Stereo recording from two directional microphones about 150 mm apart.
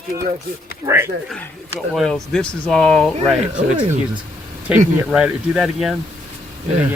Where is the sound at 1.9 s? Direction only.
Centre (ahead or behind).